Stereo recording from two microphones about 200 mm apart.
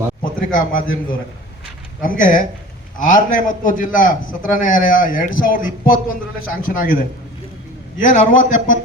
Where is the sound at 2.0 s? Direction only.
40° left (ahead or behind).